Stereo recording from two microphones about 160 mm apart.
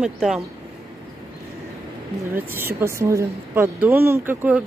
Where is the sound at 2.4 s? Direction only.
15° right (ahead or behind).